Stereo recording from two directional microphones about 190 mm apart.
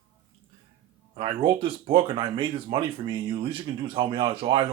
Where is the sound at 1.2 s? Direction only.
25° right (ahead or behind).